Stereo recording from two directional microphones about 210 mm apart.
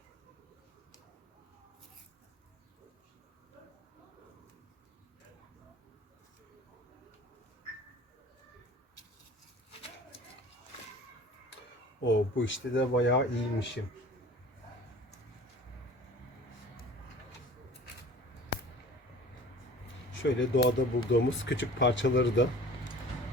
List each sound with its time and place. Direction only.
12.0 s speech: 65° left (ahead or behind)
20.1 s speech: 65° left (ahead or behind)